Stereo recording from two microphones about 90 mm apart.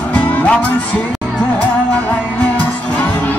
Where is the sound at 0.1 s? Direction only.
15° left (ahead or behind).